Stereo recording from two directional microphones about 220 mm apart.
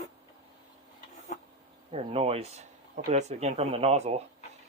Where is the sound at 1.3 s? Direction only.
35° left (ahead or behind).